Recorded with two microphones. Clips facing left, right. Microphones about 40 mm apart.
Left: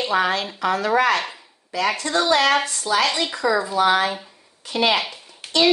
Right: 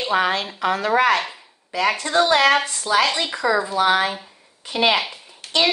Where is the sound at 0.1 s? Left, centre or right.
Right.